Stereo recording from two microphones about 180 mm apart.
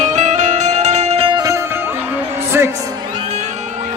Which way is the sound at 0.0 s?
40° right (ahead or behind).